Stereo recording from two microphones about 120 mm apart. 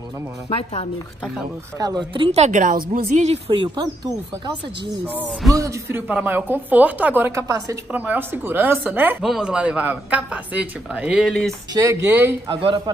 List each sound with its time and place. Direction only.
0.5 s a woman's voice: 55° left (ahead or behind)
1.8 s a woman's voice: 35° right (ahead or behind)
2.3 s a woman's voice: 80° right
3.4 s speech: 45° right (ahead or behind)
5.5 s speech: 25° right (ahead or behind)
7.9 s speech: 15° right (ahead or behind)
9.2 s speech: 5° right (ahead or behind)
11.7 s speech: 25° right (ahead or behind)
12.4 s speech: 45° right (ahead or behind)